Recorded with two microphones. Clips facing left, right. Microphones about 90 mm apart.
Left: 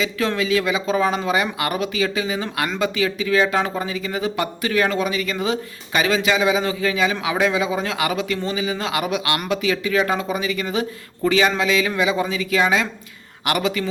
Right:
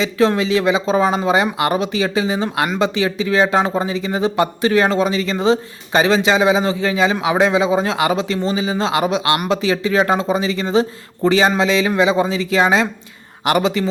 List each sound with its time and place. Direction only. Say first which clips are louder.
0.0 s speech: right 6 dB; 25° right (ahead or behind)